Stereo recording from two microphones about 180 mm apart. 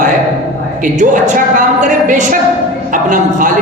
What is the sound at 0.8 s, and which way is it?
A woman's voice, 45° right (ahead or behind).